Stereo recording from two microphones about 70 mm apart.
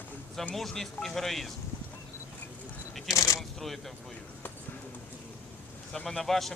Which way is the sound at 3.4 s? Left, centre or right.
Centre.